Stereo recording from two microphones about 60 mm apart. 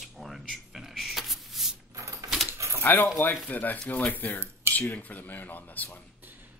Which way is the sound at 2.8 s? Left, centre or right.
Left.